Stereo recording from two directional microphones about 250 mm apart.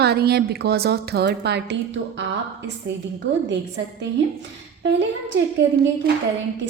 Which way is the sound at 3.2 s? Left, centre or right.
Right.